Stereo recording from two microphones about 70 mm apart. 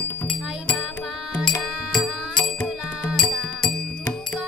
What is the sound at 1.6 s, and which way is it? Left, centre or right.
Music, centre.